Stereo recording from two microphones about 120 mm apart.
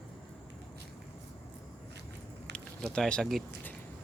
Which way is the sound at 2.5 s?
5° left (ahead or behind).